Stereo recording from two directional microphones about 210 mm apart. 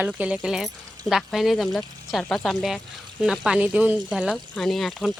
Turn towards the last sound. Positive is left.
turn(degrees=0)  # may be behind; listen again after turning